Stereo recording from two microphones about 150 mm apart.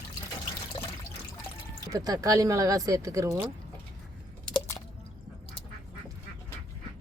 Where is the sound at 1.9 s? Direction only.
25° right (ahead or behind).